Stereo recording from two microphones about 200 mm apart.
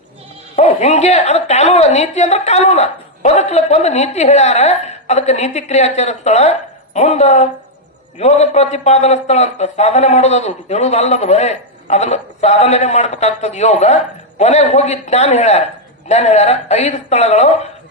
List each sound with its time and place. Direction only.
0.5 s a man's voice: 35° left (ahead or behind)